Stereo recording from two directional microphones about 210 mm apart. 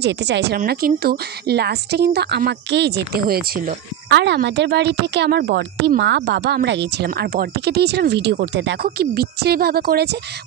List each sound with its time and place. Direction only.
0.0 s a woman's voice: 55° right (ahead or behind)
0.6 s a woman's voice: 45° right (ahead or behind)